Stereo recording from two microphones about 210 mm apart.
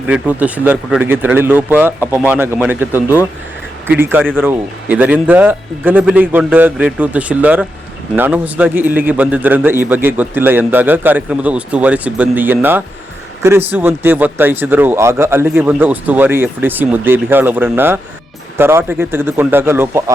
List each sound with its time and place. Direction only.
0.1 s a man's voice: 5° right (ahead or behind)